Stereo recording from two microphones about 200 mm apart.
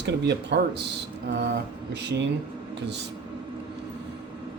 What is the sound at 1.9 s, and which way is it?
Speech, 60° right (ahead or behind).